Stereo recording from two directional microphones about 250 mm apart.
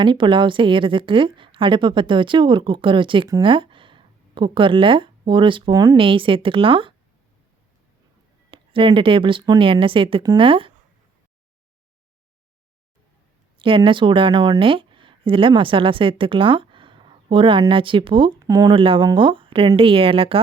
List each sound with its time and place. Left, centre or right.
0.0 s a woman's voice: centre
8.4 s a woman's voice: right
13.6 s a woman's voice: right